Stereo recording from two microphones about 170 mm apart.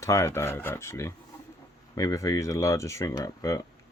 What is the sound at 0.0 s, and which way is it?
Speech, 15° left (ahead or behind).